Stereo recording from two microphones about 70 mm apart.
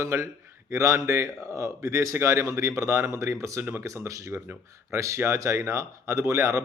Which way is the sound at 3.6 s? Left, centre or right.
Right.